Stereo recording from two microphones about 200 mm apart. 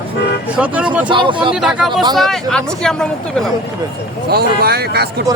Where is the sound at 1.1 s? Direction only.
25° right (ahead or behind).